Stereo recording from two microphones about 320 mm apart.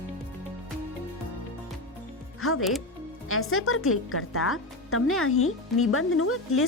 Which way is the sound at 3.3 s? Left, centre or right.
Left.